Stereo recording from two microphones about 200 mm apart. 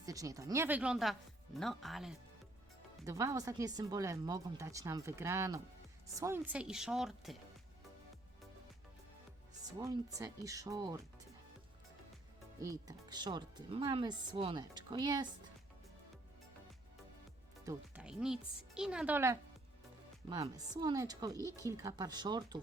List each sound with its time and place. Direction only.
0.0 s speech: 15° right (ahead or behind); by 2.1 s centre (ahead or behind)
3.1 s speech: 15° right (ahead or behind)
9.7 s speech: 20° right (ahead or behind)
12.6 s speech: 20° right (ahead or behind)
17.7 s speech: 5° right (ahead or behind)